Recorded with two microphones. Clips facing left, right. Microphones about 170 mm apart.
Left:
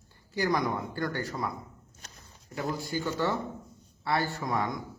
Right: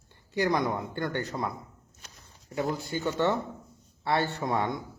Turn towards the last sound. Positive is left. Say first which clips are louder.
# right 2 dB
turn(degrees=-25)  # may be behind; listen again after turning